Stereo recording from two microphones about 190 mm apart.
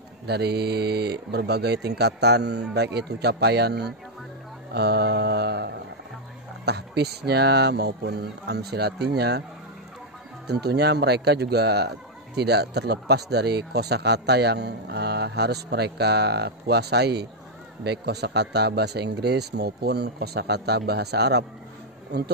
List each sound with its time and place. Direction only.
0.3 s speech: 60° right (ahead or behind)
4.7 s mantra: 60° right (ahead or behind)
6.6 s speech: 60° right (ahead or behind)
10.4 s speech: 60° right (ahead or behind)